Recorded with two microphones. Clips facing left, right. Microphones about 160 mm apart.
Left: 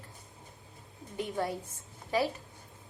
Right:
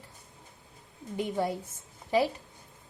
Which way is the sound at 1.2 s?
15° right (ahead or behind).